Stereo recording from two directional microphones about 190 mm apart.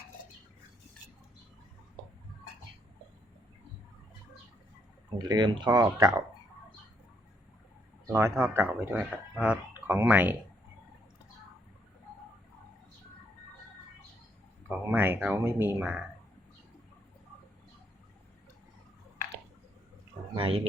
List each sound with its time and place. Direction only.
5.1 s speech: 20° right (ahead or behind)
8.0 s speech: 15° right (ahead or behind)
14.7 s speech: 10° right (ahead or behind)
20.3 s speech: 30° right (ahead or behind)